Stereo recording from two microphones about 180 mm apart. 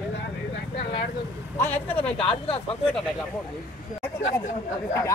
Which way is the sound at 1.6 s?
10° left (ahead or behind).